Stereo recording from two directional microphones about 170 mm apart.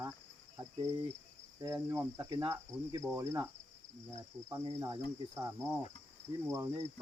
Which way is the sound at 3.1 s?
20° right (ahead or behind).